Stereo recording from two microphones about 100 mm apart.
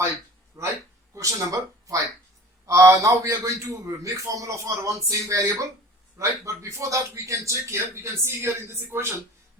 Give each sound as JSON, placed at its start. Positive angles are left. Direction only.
{"t": 0.6, "sound": "a man's voice", "side_deg": -35}